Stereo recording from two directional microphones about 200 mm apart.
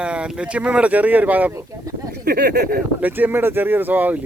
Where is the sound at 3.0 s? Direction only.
10° right (ahead or behind).